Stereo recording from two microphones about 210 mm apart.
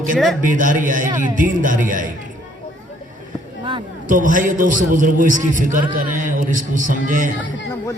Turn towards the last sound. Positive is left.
turn(degrees=-40)  # may be behind; listen again after turning